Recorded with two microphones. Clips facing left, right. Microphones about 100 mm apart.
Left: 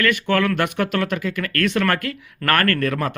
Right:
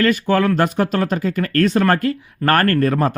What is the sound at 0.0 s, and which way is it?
Speech, 35° right (ahead or behind).